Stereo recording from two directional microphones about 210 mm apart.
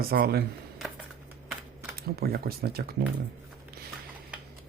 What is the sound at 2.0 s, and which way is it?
Speech, 45° right (ahead or behind).